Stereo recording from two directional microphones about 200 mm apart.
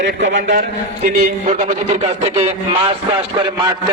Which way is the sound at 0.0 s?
65° right (ahead or behind).